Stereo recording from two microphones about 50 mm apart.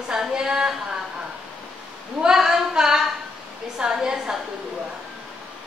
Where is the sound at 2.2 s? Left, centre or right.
Centre.